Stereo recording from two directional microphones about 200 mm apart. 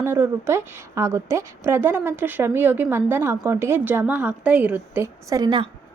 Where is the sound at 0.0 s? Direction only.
10° right (ahead or behind).